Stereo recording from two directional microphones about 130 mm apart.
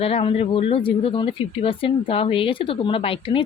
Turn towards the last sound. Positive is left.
turn(degrees=40)  # may be behind; listen again after turning